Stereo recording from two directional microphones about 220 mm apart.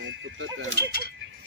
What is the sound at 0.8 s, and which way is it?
Speech, 45° left (ahead or behind).